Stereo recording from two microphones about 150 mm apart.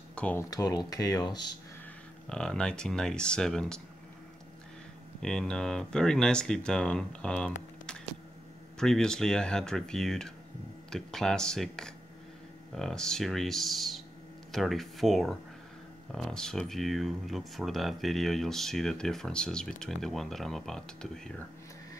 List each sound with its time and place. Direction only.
0.1 s a sound: 10° left (ahead or behind)
0.4 s speech: 25° left (ahead or behind)
2.2 s speech: 5° left (ahead or behind)
5.2 s speech: 5° left (ahead or behind)